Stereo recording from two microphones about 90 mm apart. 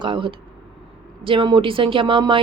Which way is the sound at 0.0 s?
70° right (ahead or behind).